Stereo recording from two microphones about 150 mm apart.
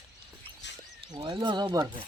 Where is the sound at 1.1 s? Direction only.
30° right (ahead or behind).